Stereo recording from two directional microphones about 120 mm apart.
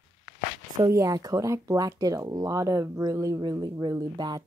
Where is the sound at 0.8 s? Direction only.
30° right (ahead or behind).